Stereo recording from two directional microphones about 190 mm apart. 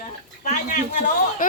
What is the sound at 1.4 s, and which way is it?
Speech, 45° left (ahead or behind).